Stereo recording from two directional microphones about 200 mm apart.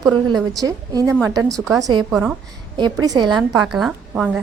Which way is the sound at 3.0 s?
20° right (ahead or behind).